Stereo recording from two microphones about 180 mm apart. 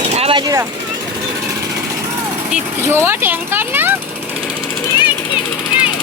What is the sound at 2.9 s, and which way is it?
Speech, 15° right (ahead or behind).